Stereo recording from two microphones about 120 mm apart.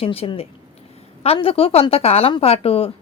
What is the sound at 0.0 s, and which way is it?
Speech, 50° left (ahead or behind).